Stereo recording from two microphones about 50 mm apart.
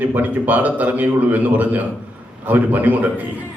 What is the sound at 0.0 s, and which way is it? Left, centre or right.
A man's voice, right.